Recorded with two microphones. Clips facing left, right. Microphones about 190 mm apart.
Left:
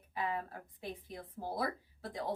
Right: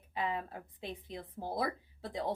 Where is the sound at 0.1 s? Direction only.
20° right (ahead or behind).